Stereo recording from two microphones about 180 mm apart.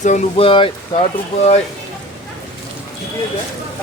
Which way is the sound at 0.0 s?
35° left (ahead or behind).